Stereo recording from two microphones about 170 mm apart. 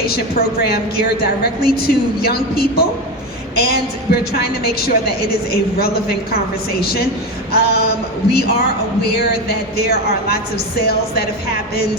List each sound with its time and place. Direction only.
0.0 s a woman's voice: 65° left (ahead or behind)